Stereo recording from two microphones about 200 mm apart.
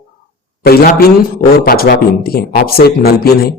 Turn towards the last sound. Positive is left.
turn(degrees=50)  # may be behind; listen again after turning